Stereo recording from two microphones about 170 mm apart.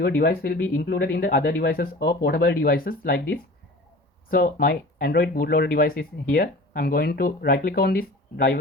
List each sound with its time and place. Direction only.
0.0 s speech: 65° left (ahead or behind)